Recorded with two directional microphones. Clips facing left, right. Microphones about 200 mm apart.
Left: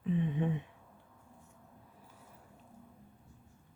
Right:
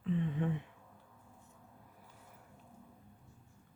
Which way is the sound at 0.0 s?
15° left (ahead or behind).